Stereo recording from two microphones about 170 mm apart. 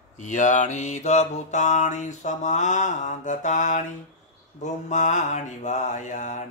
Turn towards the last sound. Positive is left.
turn(degrees=45)  # may be behind; listen again after turning